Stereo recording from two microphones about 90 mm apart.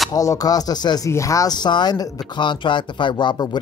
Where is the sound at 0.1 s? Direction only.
40° left (ahead or behind).